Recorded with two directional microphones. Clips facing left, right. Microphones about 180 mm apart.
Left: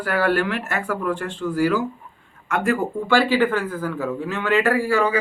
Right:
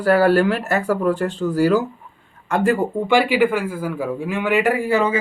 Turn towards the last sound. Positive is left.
turn(degrees=-20)  # may be behind; listen again after turning